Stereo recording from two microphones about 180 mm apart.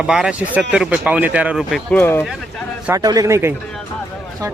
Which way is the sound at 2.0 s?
15° left (ahead or behind).